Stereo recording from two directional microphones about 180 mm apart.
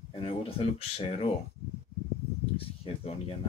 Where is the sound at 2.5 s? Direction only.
30° left (ahead or behind).